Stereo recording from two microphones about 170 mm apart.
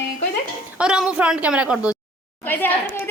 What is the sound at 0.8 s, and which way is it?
A woman's voice, 5° right (ahead or behind).